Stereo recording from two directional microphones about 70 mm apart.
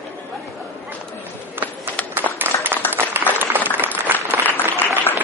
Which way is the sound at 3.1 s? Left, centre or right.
Right.